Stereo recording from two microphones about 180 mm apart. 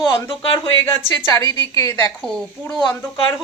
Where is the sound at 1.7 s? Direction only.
15° left (ahead or behind).